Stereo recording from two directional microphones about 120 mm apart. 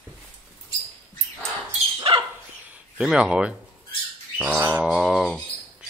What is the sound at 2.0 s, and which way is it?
Dog, 50° right (ahead or behind).